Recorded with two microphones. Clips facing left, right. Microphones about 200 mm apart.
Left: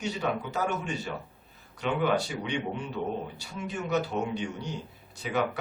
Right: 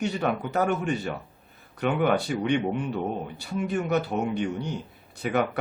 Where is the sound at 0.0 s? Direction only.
55° right (ahead or behind).